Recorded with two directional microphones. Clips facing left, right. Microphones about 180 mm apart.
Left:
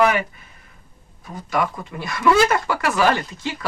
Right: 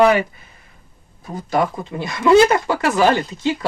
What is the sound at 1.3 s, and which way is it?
Speech, 30° right (ahead or behind).